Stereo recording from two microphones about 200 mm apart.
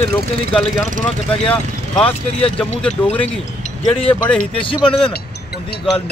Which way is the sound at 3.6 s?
30° left (ahead or behind).